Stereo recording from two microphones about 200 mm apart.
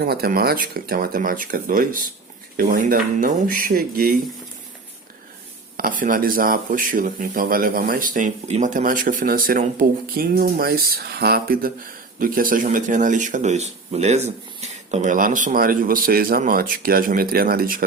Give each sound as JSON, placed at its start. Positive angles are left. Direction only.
{"t": 0.0, "sound": "speech", "side_deg": -50}
{"t": 5.7, "sound": "speech", "side_deg": -45}